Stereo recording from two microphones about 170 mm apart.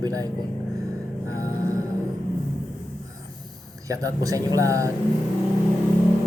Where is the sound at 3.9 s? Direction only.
20° right (ahead or behind).